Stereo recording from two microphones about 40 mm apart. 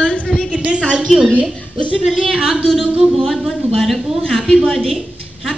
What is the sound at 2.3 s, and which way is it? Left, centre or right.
Speech, centre.